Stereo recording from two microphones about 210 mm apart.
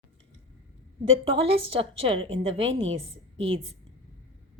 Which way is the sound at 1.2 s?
25° right (ahead or behind).